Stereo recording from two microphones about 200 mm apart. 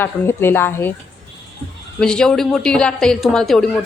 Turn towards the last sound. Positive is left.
turn(degrees=0)  # may be behind; listen again after turning